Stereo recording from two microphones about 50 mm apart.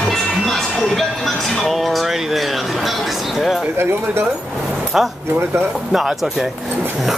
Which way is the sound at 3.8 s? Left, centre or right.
Right.